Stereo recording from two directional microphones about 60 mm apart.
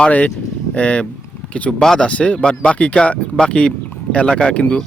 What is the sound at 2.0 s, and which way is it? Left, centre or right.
Speech, centre.